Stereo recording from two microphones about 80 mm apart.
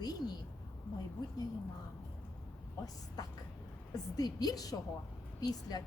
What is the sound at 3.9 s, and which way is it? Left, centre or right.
A woman's voice, left.